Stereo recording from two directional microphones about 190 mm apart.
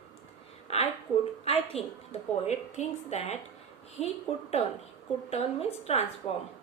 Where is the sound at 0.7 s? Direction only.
35° left (ahead or behind).